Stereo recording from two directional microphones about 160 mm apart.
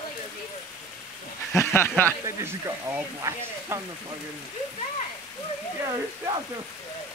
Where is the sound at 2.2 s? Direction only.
20° right (ahead or behind).